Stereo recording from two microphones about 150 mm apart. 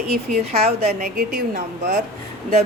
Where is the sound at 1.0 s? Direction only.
80° right.